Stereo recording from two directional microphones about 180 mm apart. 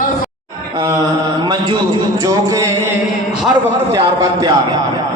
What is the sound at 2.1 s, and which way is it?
Music, 20° right (ahead or behind).